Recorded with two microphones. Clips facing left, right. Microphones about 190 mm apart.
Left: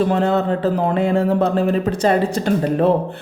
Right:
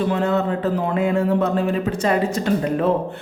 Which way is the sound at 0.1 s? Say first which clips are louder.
Left 3 dB; 35° left (ahead or behind).